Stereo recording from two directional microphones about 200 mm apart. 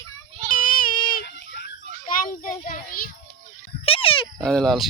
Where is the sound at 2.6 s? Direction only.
45° left (ahead or behind).